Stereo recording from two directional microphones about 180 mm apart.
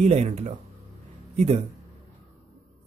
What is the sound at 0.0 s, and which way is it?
Speech, 35° right (ahead or behind).